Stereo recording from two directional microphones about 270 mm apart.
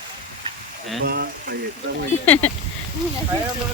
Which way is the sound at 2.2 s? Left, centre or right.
Centre.